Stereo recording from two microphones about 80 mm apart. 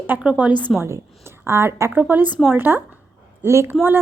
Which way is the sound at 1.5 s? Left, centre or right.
Right.